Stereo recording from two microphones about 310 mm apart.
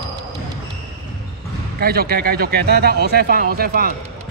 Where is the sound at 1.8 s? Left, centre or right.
Right.